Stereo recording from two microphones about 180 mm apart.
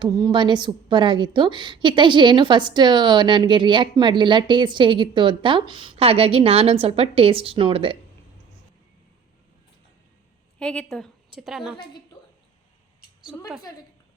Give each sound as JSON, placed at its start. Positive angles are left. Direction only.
{"t": 0.0, "sound": "a woman's voice", "side_deg": -25}
{"t": 10.6, "sound": "a woman's voice", "side_deg": 5}